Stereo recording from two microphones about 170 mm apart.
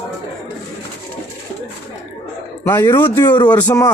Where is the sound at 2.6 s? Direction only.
15° left (ahead or behind).